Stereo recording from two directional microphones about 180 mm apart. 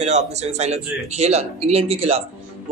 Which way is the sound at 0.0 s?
40° right (ahead or behind).